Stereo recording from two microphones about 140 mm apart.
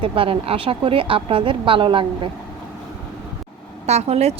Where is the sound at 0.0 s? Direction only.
40° right (ahead or behind).